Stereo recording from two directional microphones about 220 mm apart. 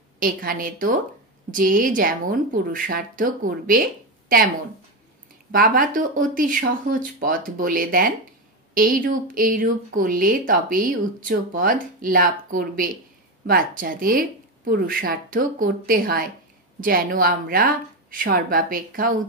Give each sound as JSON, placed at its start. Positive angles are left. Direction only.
{"t": 0.2, "sound": "speech", "side_deg": -40}
{"t": 5.5, "sound": "speech", "side_deg": -40}